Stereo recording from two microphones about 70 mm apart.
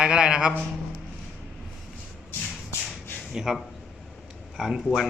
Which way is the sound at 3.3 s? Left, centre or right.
Centre.